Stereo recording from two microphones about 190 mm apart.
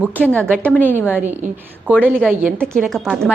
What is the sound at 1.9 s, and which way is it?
Speech, 10° right (ahead or behind).